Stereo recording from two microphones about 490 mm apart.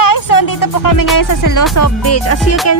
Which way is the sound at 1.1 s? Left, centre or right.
Left.